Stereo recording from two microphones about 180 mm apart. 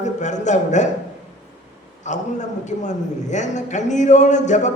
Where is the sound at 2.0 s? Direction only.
40° left (ahead or behind).